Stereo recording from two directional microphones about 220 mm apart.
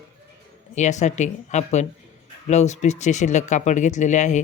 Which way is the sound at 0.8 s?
30° left (ahead or behind).